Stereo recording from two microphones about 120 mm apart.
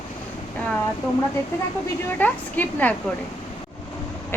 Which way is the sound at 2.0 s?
15° left (ahead or behind).